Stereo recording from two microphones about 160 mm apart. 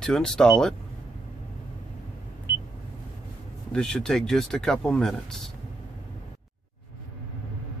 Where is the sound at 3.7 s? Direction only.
5° left (ahead or behind).